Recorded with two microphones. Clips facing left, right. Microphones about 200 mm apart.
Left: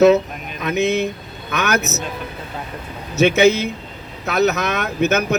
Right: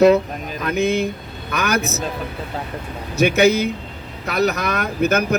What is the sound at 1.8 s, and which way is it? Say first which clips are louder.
Speech: right 1 dB; 30° right (ahead or behind).